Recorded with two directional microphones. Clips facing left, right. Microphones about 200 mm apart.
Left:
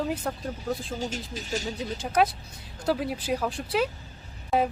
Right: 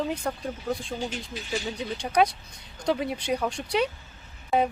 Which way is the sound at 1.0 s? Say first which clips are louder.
Even; 40° left (ahead or behind).